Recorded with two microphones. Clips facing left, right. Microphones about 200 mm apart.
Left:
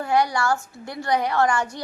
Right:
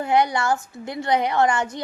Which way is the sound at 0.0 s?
20° right (ahead or behind).